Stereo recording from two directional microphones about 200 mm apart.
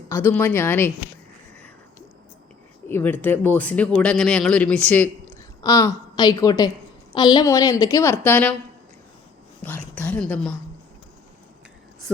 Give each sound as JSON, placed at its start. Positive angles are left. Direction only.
{"t": 0.1, "sound": "speech", "side_deg": 10}
{"t": 2.9, "sound": "speech", "side_deg": 10}
{"t": 9.6, "sound": "a woman's voice", "side_deg": 10}